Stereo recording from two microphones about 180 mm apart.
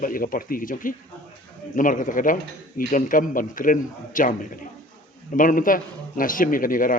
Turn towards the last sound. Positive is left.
turn(degrees=50)  # may be behind; listen again after turning